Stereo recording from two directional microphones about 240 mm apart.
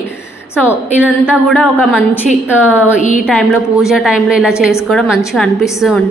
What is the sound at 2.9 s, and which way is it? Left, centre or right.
Speech, left.